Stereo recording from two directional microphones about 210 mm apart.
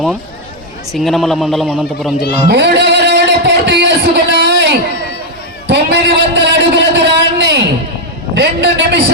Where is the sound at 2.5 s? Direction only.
55° right (ahead or behind).